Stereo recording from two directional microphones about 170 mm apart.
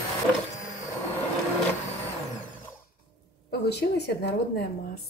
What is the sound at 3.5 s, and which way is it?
A woman's voice, 75° left (ahead or behind).